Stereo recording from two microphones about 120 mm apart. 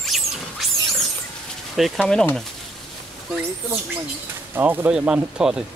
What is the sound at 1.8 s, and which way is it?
Speech, 5° left (ahead or behind).